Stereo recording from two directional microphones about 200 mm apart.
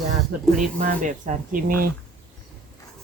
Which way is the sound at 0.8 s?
40° right (ahead or behind).